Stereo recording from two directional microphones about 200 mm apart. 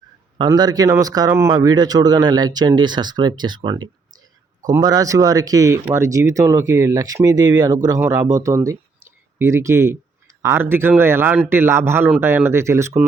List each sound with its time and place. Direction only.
0.3 s speech: 20° right (ahead or behind)